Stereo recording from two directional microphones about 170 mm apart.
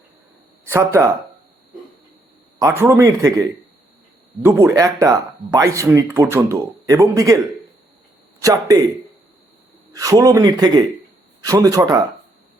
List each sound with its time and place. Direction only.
0.7 s speech: 15° right (ahead or behind)
2.6 s speech: 15° right (ahead or behind)
4.4 s speech: 15° right (ahead or behind)
8.4 s speech: 20° right (ahead or behind)
9.9 s speech: 20° right (ahead or behind)